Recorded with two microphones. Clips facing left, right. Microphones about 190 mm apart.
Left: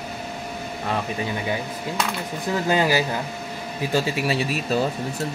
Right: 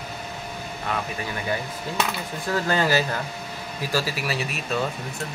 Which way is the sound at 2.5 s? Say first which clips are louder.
Left 2 dB; 15° left (ahead or behind).